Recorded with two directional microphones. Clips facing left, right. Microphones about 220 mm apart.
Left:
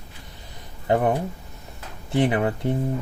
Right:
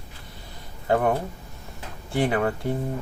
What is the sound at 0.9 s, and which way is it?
Speech, 20° left (ahead or behind).